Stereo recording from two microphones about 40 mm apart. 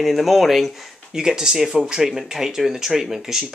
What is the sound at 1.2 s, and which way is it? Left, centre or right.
Speech, centre.